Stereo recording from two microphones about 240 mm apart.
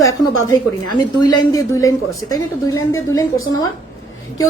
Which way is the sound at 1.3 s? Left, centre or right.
Centre.